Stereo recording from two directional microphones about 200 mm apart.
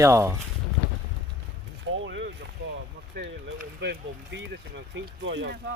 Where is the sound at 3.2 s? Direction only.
50° right (ahead or behind).